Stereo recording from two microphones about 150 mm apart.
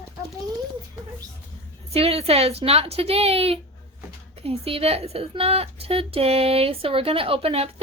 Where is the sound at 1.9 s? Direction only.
40° right (ahead or behind).